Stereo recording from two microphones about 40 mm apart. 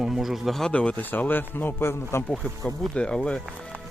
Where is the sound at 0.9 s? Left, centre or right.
Left.